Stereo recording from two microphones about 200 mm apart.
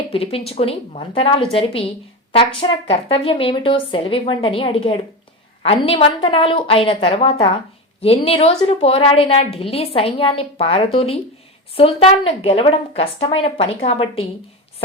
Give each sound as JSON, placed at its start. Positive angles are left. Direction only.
{"t": 0.1, "sound": "a woman's voice", "side_deg": 30}